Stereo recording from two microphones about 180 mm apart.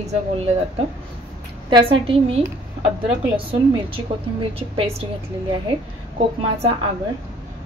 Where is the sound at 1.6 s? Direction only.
25° right (ahead or behind).